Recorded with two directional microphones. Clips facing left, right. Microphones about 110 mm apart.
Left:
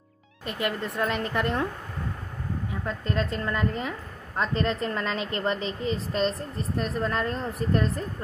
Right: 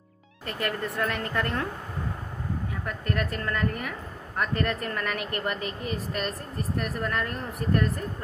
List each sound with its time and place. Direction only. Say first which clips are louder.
0.5 s a woman's voice: left 1 dB; 20° left (ahead or behind)
2.8 s a woman's voice: left 2 dB; 25° left (ahead or behind)